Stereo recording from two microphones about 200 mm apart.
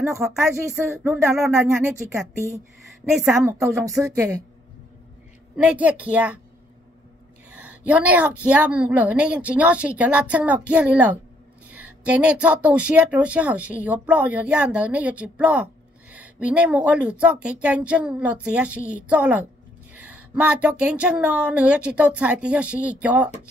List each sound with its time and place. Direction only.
0.2 s speech: 5° right (ahead or behind)
5.6 s speech: 5° right (ahead or behind)
7.8 s speech: 5° right (ahead or behind)